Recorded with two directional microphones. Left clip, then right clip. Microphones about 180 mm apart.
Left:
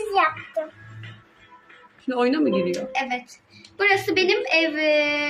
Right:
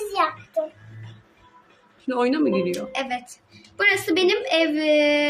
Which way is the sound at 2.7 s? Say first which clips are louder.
Left 1 dB; 90° right.